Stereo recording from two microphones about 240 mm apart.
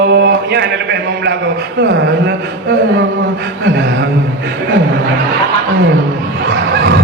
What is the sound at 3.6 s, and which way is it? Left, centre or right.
Speech, right.